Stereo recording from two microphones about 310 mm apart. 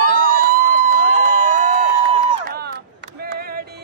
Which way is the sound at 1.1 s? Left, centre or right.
Right.